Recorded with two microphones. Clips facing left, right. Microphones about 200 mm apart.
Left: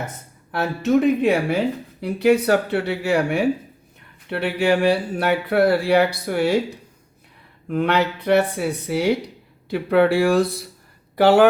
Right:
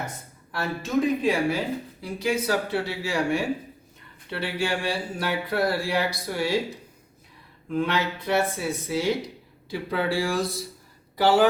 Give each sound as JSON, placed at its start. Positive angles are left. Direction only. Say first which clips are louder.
{"t": 0.5, "sound": "speech", "louder": "left 7 dB", "side_deg": 65}
{"t": 7.7, "sound": "speech", "louder": "left 5 dB", "side_deg": 65}